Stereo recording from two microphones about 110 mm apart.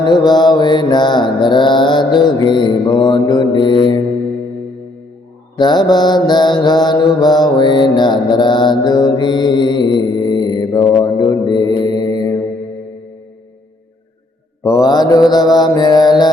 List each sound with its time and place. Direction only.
0.0 s mantra: 40° left (ahead or behind)
5.5 s mantra: 40° left (ahead or behind)
14.6 s mantra: 35° left (ahead or behind)